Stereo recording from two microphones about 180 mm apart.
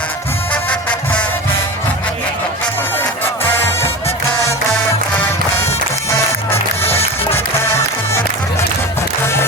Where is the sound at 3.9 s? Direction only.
35° left (ahead or behind).